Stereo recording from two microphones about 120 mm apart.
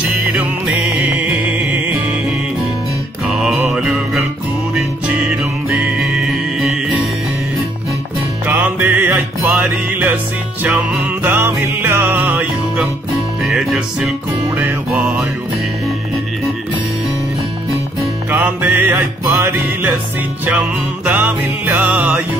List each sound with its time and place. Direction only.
0.3 s music: 10° right (ahead or behind)
3.3 s music: 5° right (ahead or behind)
8.5 s music: 15° right (ahead or behind)
13.4 s music: 5° right (ahead or behind)
18.6 s music: 20° right (ahead or behind)
21.0 s music: 10° right (ahead or behind)